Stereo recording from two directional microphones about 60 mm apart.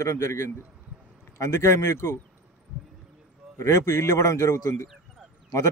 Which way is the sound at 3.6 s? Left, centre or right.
Left.